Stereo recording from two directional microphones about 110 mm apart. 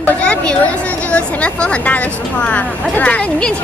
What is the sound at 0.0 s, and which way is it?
Chatter, 10° left (ahead or behind).